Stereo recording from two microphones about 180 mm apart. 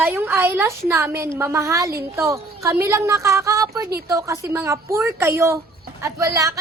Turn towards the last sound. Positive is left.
turn(degrees=-15)  # may be behind; listen again after turning